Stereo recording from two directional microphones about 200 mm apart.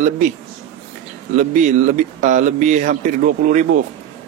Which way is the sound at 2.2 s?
40° right (ahead or behind).